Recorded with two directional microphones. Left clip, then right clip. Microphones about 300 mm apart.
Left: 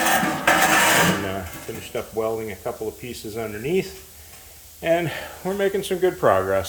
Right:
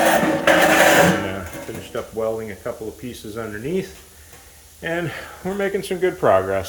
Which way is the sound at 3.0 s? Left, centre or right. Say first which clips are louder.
Even; centre.